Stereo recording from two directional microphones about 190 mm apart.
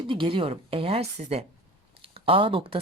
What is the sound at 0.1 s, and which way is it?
Speech, 25° right (ahead or behind).